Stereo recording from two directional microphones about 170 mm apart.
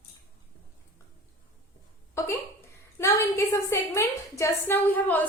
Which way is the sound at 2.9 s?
15° left (ahead or behind).